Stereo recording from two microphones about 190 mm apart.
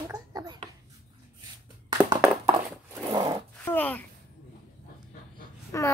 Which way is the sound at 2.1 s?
15° right (ahead or behind).